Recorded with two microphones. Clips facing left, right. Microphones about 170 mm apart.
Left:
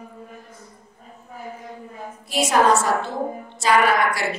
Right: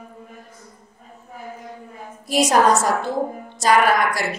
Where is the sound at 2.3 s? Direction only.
40° right (ahead or behind).